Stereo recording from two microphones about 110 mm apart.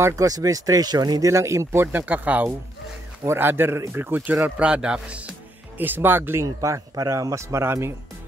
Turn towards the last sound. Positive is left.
turn(degrees=-25)  # may be behind; listen again after turning